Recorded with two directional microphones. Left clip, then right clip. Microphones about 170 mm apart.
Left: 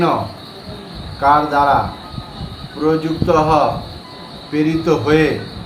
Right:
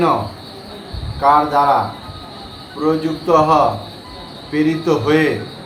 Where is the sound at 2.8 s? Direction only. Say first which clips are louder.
Left 1 dB; 10° left (ahead or behind).